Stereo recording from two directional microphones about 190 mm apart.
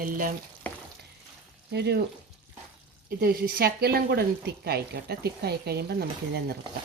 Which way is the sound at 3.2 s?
50° right (ahead or behind).